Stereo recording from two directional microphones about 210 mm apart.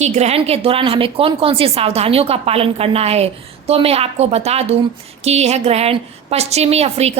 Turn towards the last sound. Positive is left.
turn(degrees=-30)  # may be behind; listen again after turning